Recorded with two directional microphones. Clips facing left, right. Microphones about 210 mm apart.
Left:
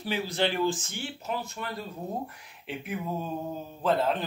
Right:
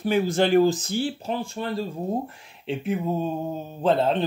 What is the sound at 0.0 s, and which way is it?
Speech, 50° right (ahead or behind).